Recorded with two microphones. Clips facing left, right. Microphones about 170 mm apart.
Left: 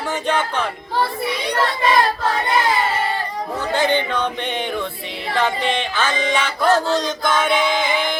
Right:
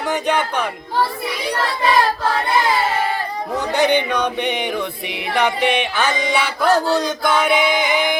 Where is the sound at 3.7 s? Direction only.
15° right (ahead or behind).